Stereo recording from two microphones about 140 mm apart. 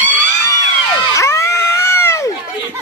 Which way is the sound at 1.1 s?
20° left (ahead or behind).